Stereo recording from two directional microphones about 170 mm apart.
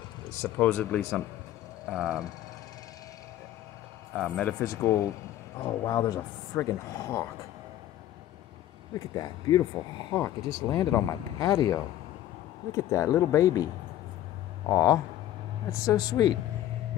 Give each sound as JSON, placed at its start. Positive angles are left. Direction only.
{"t": 0.4, "sound": "speech", "side_deg": 10}
{"t": 1.9, "sound": "speech", "side_deg": -5}
{"t": 4.1, "sound": "speech", "side_deg": 5}
{"t": 8.9, "sound": "speech", "side_deg": 20}
{"t": 14.7, "sound": "speech", "side_deg": 20}